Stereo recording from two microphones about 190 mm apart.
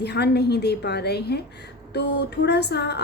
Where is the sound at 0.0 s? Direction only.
60° left (ahead or behind).